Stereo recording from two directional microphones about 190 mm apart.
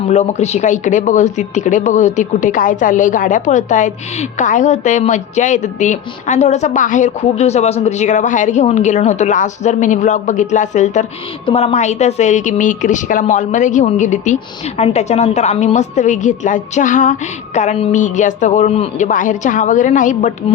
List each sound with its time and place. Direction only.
0.1 s speech: 35° left (ahead or behind)